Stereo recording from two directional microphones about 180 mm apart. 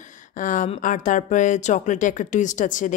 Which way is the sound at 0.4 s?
45° left (ahead or behind).